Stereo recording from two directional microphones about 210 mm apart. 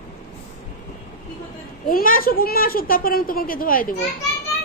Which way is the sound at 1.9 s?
40° left (ahead or behind).